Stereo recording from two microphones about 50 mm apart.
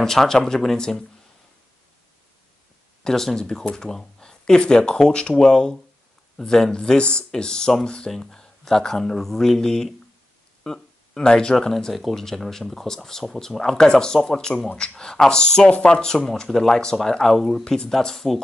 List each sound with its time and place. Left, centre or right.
0.0 s speech: centre
3.0 s speech: centre
10.6 s a sound: centre
12.1 s speech: centre
13.7 s speech: centre
16.4 s speech: centre